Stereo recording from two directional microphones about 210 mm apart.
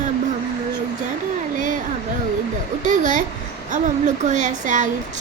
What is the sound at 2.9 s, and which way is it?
Speech, 35° right (ahead or behind).